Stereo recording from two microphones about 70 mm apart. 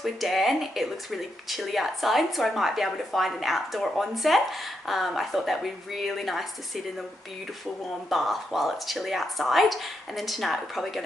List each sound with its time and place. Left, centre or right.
0.0 s speech: centre
8.1 s speech: centre